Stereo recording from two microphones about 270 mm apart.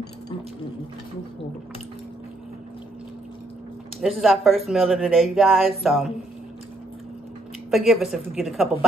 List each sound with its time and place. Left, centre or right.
4.0 s speech: centre
7.7 s speech: centre